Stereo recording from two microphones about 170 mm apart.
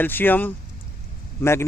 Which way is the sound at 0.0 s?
10° left (ahead or behind).